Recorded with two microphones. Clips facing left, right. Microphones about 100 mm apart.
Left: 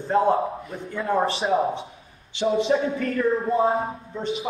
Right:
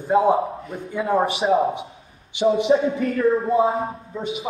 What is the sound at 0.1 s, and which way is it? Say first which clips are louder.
A man's voice: right 3 dB; 10° right (ahead or behind).